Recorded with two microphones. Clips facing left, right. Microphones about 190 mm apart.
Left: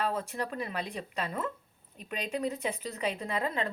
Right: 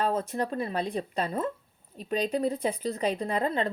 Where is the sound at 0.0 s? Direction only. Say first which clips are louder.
Right 5 dB; 30° right (ahead or behind).